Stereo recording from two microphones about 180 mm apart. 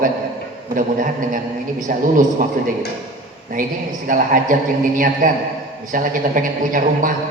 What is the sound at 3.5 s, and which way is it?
A man's voice, 50° right (ahead or behind).